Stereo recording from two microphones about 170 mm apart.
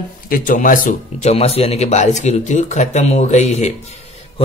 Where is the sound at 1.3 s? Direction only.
35° left (ahead or behind).